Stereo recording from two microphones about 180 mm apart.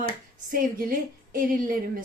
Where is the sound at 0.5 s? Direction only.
50° right (ahead or behind).